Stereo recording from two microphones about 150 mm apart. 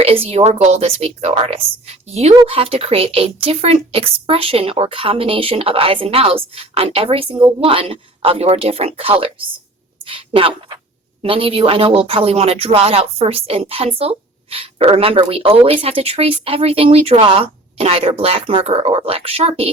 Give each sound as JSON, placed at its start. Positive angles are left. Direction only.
{"t": 0.0, "sound": "a woman's voice", "side_deg": -40}